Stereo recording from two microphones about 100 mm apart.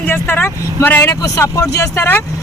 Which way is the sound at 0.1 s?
20° left (ahead or behind).